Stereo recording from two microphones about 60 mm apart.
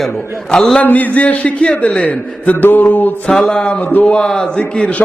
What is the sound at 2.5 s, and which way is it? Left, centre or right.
Mantra, left.